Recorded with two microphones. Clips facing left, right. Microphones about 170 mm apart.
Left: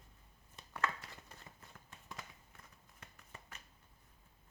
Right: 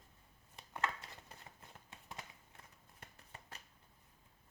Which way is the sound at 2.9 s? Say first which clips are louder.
Even; 30° right (ahead or behind).